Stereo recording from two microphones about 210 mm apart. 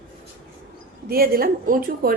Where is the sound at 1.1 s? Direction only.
45° right (ahead or behind).